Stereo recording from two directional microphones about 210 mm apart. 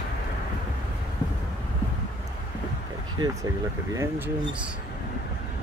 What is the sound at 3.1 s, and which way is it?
Speech, 20° right (ahead or behind).